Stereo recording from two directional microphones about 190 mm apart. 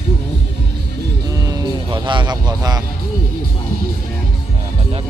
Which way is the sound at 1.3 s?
20° right (ahead or behind).